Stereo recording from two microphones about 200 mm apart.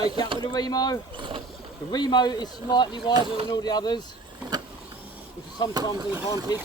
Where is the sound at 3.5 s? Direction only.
20° left (ahead or behind).